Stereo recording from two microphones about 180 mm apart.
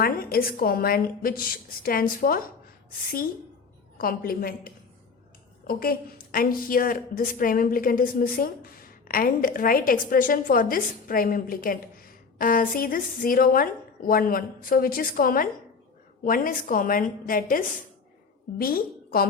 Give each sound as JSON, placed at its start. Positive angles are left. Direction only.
{"t": 0.0, "sound": "a woman's voice", "side_deg": 55}
{"t": 3.9, "sound": "a woman's voice", "side_deg": 55}